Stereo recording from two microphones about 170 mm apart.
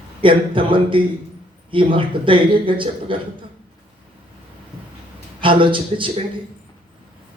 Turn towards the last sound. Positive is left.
turn(degrees=-30)  # may be behind; listen again after turning